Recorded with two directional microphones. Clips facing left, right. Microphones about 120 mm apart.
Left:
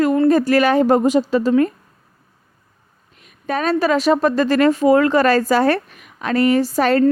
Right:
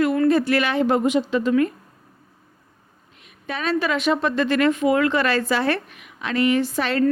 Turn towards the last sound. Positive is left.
turn(degrees=40)  # may be behind; listen again after turning